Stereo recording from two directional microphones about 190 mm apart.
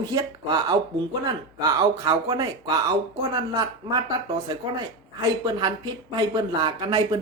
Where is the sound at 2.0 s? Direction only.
20° right (ahead or behind).